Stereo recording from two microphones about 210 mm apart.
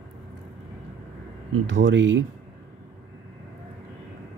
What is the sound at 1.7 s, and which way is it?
Speech, 60° right (ahead or behind).